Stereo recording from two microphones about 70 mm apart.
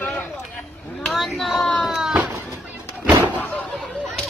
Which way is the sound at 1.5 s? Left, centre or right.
Centre.